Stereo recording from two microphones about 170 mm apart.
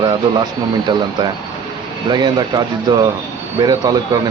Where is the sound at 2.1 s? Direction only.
25° right (ahead or behind).